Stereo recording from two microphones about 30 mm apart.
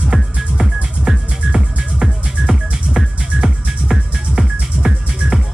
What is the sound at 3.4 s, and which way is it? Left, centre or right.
Music, centre.